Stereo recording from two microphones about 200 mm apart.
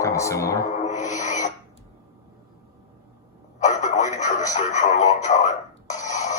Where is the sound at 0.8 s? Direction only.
35° left (ahead or behind).